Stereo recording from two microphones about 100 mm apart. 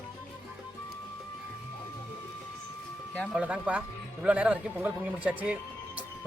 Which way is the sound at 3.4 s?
15° right (ahead or behind).